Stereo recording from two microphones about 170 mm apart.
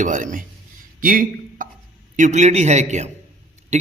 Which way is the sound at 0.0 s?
50° right (ahead or behind).